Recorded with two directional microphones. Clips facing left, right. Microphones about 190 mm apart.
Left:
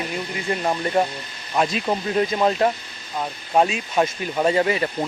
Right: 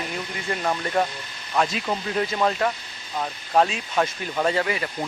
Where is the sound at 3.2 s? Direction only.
10° left (ahead or behind).